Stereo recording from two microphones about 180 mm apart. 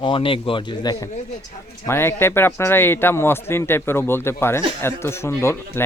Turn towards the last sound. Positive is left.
turn(degrees=15)  # may be behind; listen again after turning